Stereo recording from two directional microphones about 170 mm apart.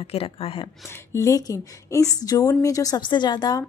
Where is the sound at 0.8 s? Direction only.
15° left (ahead or behind).